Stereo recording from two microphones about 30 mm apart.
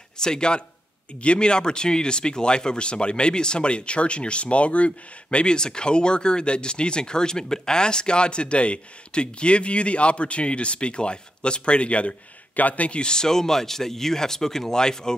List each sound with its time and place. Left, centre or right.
0.2 s a man's voice: left
5.5 s speech: left
12.5 s speech: left
13.0 s speech: left